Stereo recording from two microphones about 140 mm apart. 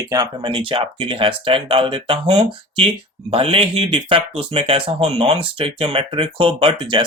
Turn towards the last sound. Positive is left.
turn(degrees=-35)  # may be behind; listen again after turning